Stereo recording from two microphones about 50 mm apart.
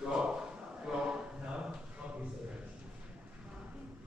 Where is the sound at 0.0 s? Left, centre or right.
Centre.